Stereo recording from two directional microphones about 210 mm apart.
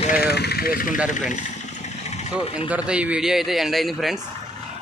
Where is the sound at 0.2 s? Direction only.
50° left (ahead or behind).